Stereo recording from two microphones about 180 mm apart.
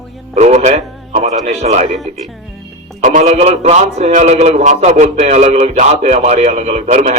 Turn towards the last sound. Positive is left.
turn(degrees=-45)  # may be behind; listen again after turning